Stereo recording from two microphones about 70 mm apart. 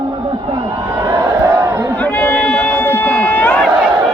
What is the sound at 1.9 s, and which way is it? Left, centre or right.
Run, left.